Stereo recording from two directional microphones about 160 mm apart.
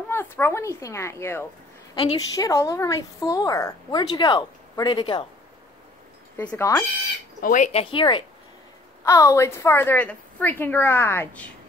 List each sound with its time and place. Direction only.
0.1 s a woman's voice: 15° left (ahead or behind)
6.3 s speech: 10° left (ahead or behind)
7.4 s speech: 50° left (ahead or behind)
7.8 s speech: 30° left (ahead or behind)
9.0 s a woman's voice: 20° left (ahead or behind)